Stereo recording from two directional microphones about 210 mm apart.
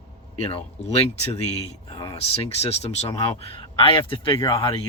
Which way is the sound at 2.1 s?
30° left (ahead or behind).